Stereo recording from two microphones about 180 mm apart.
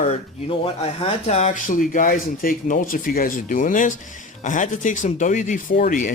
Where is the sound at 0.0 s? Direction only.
35° left (ahead or behind).